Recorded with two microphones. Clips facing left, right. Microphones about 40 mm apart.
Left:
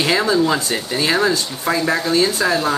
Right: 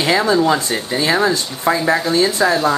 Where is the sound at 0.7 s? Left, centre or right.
Centre.